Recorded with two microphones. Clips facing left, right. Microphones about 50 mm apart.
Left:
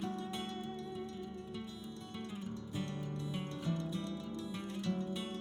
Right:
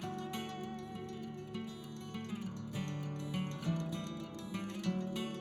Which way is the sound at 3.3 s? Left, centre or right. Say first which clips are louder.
Right 2 dB; right.